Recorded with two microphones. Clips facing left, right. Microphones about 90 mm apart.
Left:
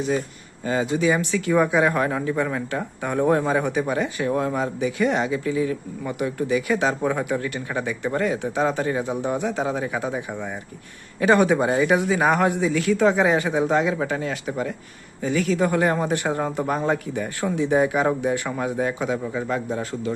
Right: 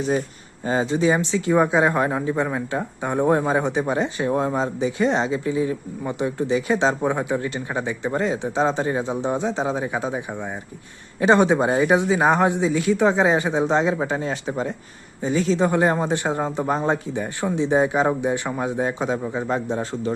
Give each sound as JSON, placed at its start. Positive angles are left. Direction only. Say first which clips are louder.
{"t": 0.6, "sound": "speech", "louder": "right 1 dB", "side_deg": -30}